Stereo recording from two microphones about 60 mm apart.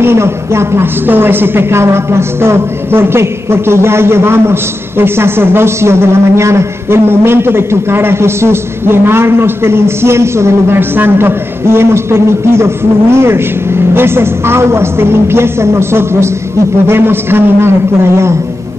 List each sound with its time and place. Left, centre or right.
0.0 s a woman's voice: right